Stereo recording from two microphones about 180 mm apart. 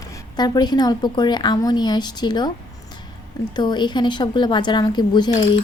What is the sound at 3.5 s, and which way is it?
Speech, 25° left (ahead or behind).